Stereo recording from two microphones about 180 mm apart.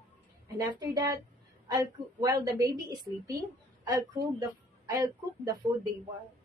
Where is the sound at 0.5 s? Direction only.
20° right (ahead or behind).